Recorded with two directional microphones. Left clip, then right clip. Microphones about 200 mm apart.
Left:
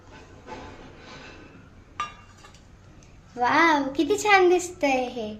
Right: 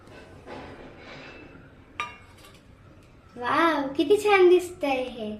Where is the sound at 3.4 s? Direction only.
25° left (ahead or behind).